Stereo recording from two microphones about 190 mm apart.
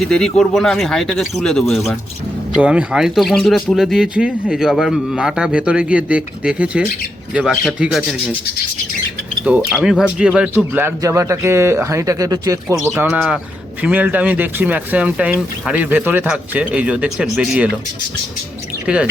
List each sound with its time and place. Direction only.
0.0 s speech: 5° left (ahead or behind)
9.4 s speech: 5° right (ahead or behind)